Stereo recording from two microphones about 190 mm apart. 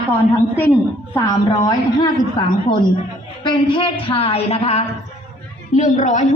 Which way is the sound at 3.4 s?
25° left (ahead or behind).